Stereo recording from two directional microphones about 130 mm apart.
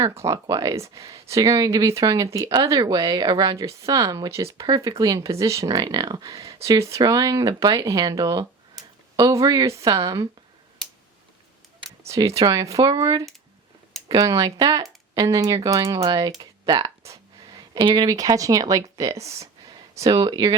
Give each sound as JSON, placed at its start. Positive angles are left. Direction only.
{"t": 0.0, "sound": "speech", "side_deg": -25}
{"t": 12.0, "sound": "speech", "side_deg": -25}